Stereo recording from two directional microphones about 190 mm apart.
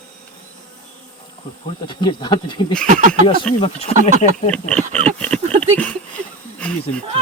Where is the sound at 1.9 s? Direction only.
25° left (ahead or behind).